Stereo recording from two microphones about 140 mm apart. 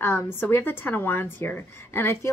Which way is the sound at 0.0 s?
15° left (ahead or behind).